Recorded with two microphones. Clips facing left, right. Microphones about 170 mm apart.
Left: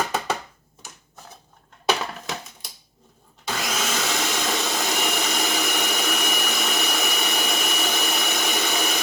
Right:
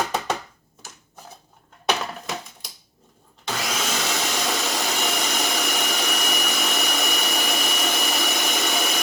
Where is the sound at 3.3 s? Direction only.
Centre (ahead or behind).